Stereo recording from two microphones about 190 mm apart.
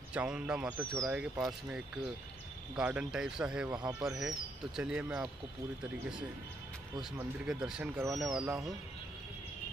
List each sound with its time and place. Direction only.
0.1 s a man's voice: 5° right (ahead or behind)
2.7 s a man's voice: 10° right (ahead or behind)
3.7 s speech: 20° right (ahead or behind)
4.2 s a man's voice: 5° right (ahead or behind)
7.2 s speech: 5° right (ahead or behind)